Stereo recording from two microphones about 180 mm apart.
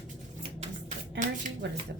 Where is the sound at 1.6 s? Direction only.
75° right (ahead or behind).